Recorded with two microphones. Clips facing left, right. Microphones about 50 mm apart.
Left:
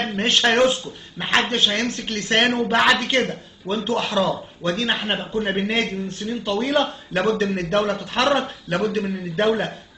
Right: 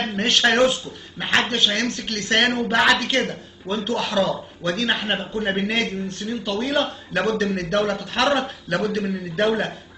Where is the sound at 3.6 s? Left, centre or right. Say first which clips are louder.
Left 1 dB; centre.